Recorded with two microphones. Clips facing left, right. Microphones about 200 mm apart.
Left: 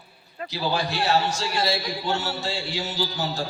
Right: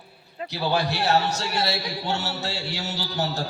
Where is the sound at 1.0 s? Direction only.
65° right (ahead or behind).